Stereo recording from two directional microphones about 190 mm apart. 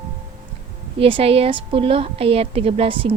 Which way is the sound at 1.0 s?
30° right (ahead or behind).